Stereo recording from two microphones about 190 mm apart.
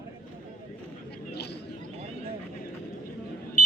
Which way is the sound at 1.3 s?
60° left (ahead or behind).